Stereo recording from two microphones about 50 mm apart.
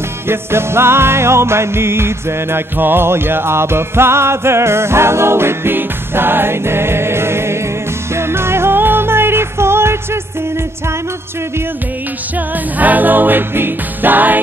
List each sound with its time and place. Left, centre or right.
0.3 s music: right
12.7 s music: right